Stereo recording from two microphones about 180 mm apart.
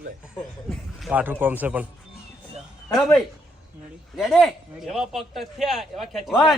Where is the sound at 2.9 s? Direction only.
Centre (ahead or behind).